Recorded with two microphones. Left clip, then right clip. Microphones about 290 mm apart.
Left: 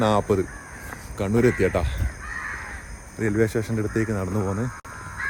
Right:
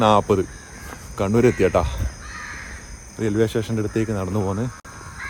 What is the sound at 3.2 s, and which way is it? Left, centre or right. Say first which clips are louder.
Speech: right 2 dB; centre.